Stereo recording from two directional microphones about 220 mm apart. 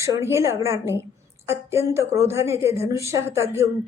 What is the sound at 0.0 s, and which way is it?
A woman's voice, 10° right (ahead or behind).